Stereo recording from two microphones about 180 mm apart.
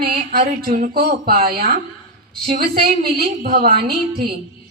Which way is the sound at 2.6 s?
55° right (ahead or behind).